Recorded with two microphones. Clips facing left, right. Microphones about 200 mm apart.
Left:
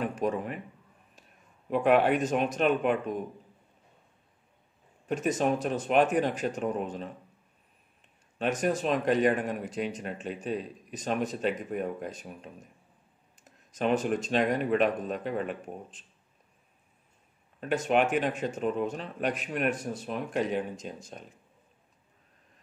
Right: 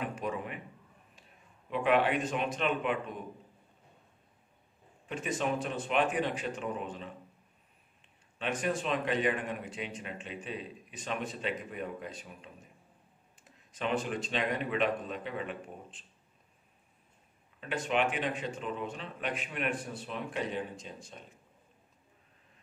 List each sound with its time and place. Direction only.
0.0 s a man's voice: 40° left (ahead or behind)
1.7 s speech: 45° left (ahead or behind)
5.0 s speech: 45° left (ahead or behind)
8.4 s speech: 45° left (ahead or behind)
17.6 s speech: 45° left (ahead or behind)